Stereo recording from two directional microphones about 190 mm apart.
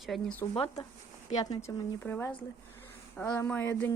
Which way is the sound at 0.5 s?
25° left (ahead or behind).